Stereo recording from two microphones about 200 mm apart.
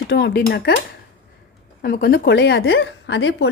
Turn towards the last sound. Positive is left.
turn(degrees=65)  # may be behind; listen again after turning